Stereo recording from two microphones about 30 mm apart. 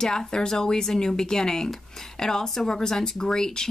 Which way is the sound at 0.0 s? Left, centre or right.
Left.